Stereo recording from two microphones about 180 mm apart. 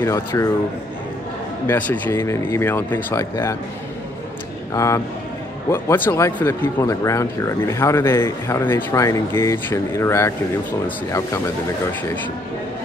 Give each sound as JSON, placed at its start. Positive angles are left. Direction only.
{"t": 0.0, "sound": "speech", "side_deg": 15}
{"t": 1.7, "sound": "speech", "side_deg": 10}
{"t": 4.7, "sound": "speech", "side_deg": 15}